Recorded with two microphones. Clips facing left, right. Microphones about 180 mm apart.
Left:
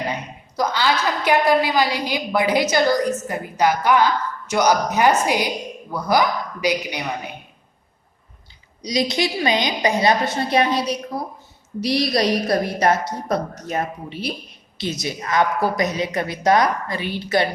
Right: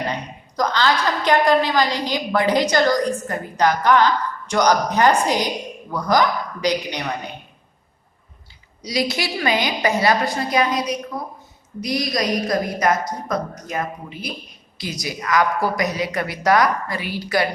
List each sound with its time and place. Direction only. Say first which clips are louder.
0.1 s a woman's voice: even; 10° left (ahead or behind)
8.8 s a woman's voice: left 2 dB; 20° left (ahead or behind)